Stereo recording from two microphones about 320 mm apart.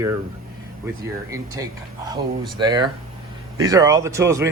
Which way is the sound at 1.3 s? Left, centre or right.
Centre.